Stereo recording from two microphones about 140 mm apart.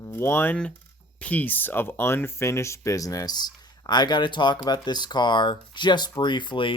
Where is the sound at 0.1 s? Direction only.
15° left (ahead or behind).